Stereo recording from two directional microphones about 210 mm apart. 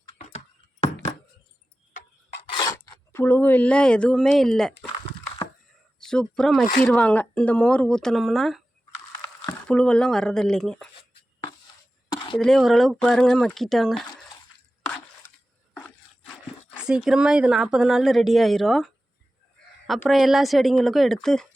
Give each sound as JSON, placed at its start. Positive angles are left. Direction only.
{"t": 2.6, "sound": "speech", "side_deg": 15}
{"t": 6.0, "sound": "speech", "side_deg": 5}
{"t": 12.1, "sound": "a sound", "side_deg": 25}
{"t": 12.4, "sound": "speech", "side_deg": 0}
{"t": 14.8, "sound": "a sound", "side_deg": 5}
{"t": 16.8, "sound": "speech", "side_deg": -5}
{"t": 19.9, "sound": "speech", "side_deg": 0}